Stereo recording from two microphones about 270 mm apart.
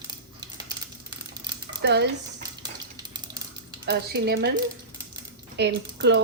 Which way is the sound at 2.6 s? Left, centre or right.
Centre.